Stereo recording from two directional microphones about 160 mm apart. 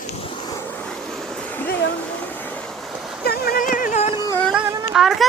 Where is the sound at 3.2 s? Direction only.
65° left (ahead or behind); by 4.1 s 50° left (ahead or behind).